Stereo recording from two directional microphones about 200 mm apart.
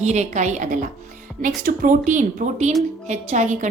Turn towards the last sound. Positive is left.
turn(degrees=-35)  # may be behind; listen again after turning